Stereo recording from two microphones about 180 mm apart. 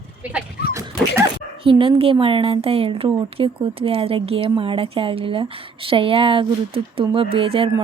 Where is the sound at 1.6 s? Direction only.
30° right (ahead or behind).